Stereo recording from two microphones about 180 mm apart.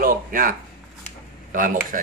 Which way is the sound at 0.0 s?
50° right (ahead or behind).